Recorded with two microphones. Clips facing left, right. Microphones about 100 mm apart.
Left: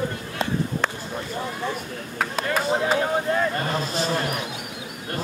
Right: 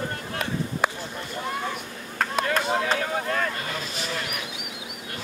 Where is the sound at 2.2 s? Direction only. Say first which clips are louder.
Even; 5° left (ahead or behind).